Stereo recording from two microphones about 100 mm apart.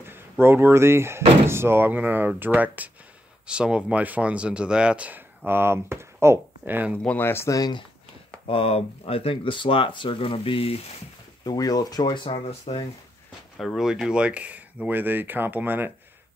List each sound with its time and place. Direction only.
0.0 s speech: 25° right (ahead or behind)
7.0 s speech: 15° left (ahead or behind)
7.5 s speech: 40° left (ahead or behind)
8.5 s speech: 70° left (ahead or behind)
11.4 s speech: 40° left (ahead or behind)
12.4 s speech: 90° left
13.6 s speech: centre (ahead or behind); by 15.9 s 20° right (ahead or behind)